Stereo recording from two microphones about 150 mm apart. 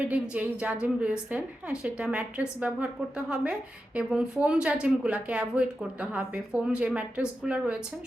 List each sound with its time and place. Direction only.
0.0 s speech: 10° right (ahead or behind)